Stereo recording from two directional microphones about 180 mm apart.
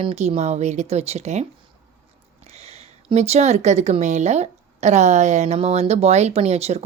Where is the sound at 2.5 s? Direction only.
35° right (ahead or behind).